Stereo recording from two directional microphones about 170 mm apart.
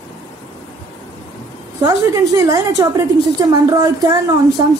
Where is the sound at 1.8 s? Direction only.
20° right (ahead or behind).